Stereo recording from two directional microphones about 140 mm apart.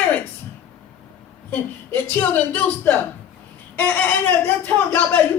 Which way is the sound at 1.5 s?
15° left (ahead or behind).